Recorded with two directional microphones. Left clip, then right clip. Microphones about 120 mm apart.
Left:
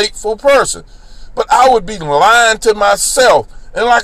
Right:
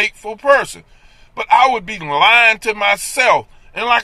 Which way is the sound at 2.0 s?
30° right (ahead or behind).